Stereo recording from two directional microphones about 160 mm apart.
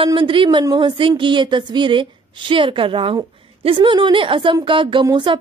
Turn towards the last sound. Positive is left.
turn(degrees=-30)  # may be behind; listen again after turning